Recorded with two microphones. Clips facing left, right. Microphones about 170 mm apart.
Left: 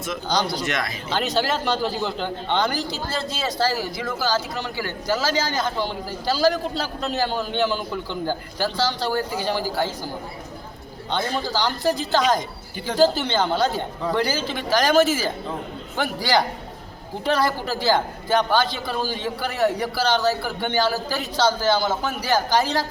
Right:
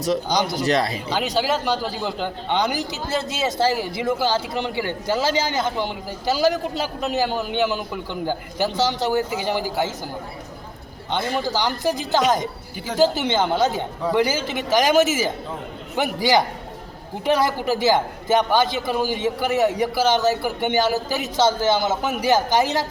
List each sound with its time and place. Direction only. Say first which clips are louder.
0.4 s speech: right 5 dB; 40° right (ahead or behind)
1.1 s a man's voice: even; 10° right (ahead or behind)
11.1 s a man's voice: right 1 dB; 10° right (ahead or behind)